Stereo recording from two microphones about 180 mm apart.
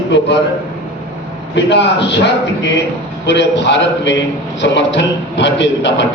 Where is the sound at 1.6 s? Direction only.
75° left (ahead or behind).